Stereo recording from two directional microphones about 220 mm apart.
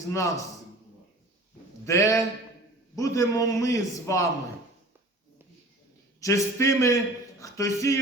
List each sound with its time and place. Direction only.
0.1 s a man's voice: 15° left (ahead or behind)
1.8 s a man's voice: 15° left (ahead or behind)
6.1 s a man's voice: 15° left (ahead or behind)